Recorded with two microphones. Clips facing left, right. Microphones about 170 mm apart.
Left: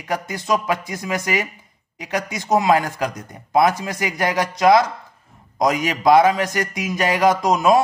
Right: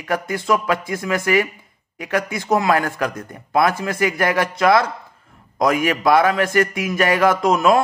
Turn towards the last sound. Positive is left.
turn(degrees=15)  # may be behind; listen again after turning